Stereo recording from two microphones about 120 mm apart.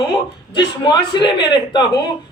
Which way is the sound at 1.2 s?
40° left (ahead or behind).